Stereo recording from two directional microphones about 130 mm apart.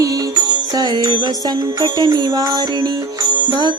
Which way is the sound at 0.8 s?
30° right (ahead or behind).